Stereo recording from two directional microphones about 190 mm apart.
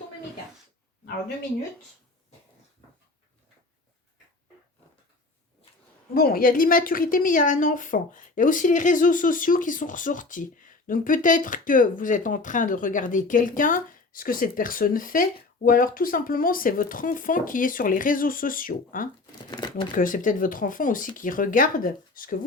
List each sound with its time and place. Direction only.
6.1 s a woman's voice: 50° left (ahead or behind)
19.5 s speech: 20° left (ahead or behind)
20.0 s a woman's voice: 45° left (ahead or behind)